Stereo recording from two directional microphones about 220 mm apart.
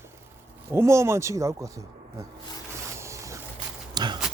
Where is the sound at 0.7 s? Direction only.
10° right (ahead or behind).